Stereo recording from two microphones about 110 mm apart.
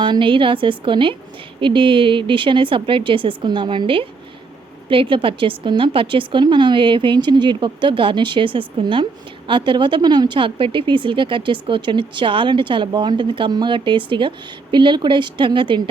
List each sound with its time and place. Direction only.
0.0 s speech: 50° right (ahead or behind)